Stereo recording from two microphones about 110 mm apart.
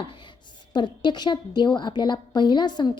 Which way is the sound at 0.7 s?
45° left (ahead or behind).